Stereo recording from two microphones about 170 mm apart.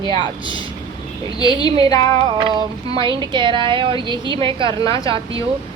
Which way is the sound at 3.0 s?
25° right (ahead or behind).